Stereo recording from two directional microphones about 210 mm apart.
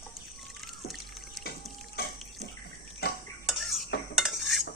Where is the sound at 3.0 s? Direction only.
50° left (ahead or behind).